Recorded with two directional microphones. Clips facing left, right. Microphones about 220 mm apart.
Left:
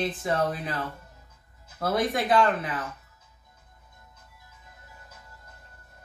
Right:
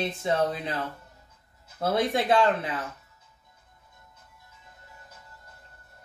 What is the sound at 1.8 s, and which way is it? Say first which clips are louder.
Speech: right 1 dB; 25° right (ahead or behind).